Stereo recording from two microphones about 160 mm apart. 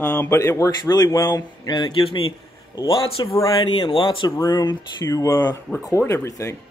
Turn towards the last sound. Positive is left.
turn(degrees=20)  # may be behind; listen again after turning